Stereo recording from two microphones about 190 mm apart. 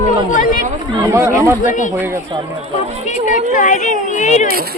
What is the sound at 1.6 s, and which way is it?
Speech, 45° left (ahead or behind).